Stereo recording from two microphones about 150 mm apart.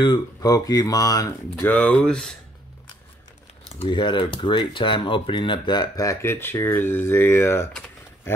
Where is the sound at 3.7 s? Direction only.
30° left (ahead or behind); by 7.7 s 15° left (ahead or behind).